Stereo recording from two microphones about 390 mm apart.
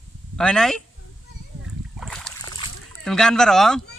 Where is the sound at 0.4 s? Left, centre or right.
Centre.